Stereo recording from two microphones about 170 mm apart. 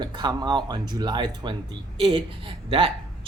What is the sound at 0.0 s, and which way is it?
Speech, 25° right (ahead or behind).